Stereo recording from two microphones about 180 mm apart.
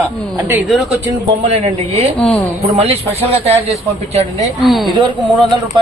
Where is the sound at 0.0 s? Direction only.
10° right (ahead or behind).